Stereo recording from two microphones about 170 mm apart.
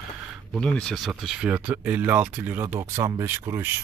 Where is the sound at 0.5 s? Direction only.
5° left (ahead or behind); by 3.7 s 15° right (ahead or behind).